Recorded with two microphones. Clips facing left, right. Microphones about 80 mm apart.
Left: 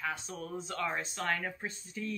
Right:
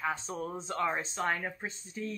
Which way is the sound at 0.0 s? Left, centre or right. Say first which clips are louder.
Right 4 dB; right.